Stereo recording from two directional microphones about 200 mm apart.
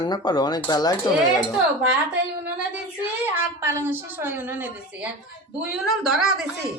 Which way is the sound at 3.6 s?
15° right (ahead or behind).